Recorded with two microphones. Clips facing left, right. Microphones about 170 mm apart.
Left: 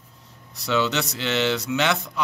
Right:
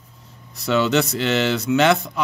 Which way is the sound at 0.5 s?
50° right (ahead or behind).